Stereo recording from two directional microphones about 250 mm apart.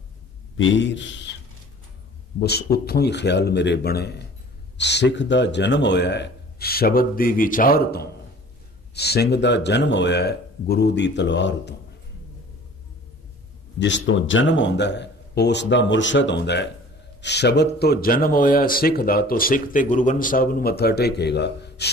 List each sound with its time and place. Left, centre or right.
0.6 s a man's voice: left
2.4 s a man's voice: left
13.7 s a man's voice: left